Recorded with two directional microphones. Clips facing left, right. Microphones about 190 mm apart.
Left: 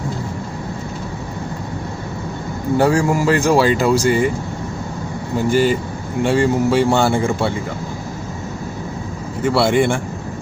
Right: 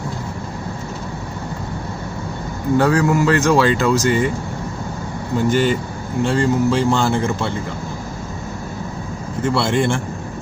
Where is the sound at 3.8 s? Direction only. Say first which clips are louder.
Left 1 dB; 35° left (ahead or behind).